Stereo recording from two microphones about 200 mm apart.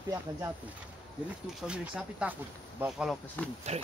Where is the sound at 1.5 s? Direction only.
5° right (ahead or behind).